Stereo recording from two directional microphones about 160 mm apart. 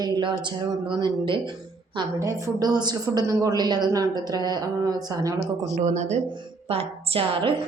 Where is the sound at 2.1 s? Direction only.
20° right (ahead or behind).